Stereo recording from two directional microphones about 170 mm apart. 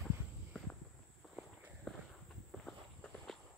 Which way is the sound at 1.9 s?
5° left (ahead or behind).